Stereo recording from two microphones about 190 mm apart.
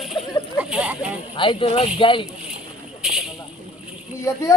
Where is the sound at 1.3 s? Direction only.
25° left (ahead or behind).